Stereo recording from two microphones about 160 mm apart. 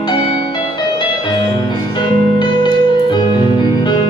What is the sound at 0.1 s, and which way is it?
Music, 30° left (ahead or behind).